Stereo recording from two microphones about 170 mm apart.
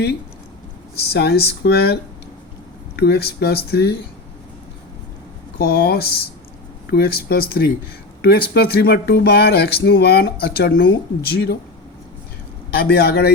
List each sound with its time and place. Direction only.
1.1 s speech: 70° left (ahead or behind)
5.5 s speech: 70° left (ahead or behind)
12.8 s speech: 70° left (ahead or behind)